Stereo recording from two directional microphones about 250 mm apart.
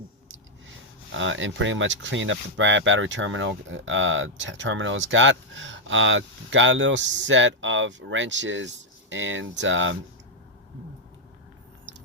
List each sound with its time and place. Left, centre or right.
1.1 s speech: right